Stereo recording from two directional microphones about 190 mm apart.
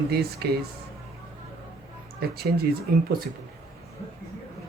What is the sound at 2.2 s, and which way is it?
Speech, 55° right (ahead or behind).